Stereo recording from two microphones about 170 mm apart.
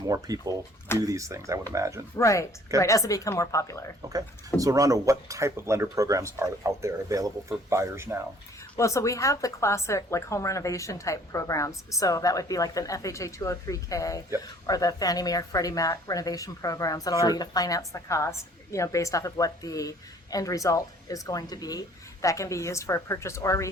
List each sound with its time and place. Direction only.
0.0 s speech: 20° right (ahead or behind)
2.1 s a woman's voice: 20° left (ahead or behind)
4.1 s speech: 20° right (ahead or behind)
8.7 s a woman's voice: 15° left (ahead or behind)